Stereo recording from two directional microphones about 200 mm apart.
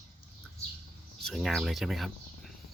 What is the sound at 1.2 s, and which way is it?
Speech, centre (ahead or behind).